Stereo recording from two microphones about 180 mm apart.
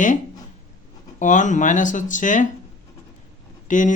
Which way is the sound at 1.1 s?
45° left (ahead or behind).